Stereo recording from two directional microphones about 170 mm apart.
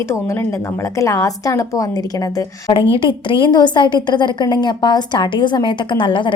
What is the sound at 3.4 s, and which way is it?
A woman's voice, 25° left (ahead or behind).